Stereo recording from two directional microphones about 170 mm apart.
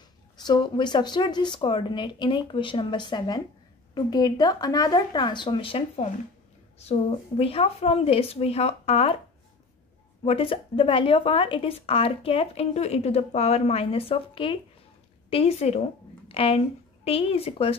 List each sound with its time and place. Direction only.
0.4 s speech: 25° left (ahead or behind)
10.2 s speech: 35° left (ahead or behind)